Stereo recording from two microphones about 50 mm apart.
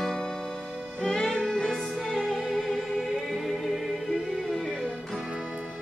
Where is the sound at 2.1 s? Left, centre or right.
Centre.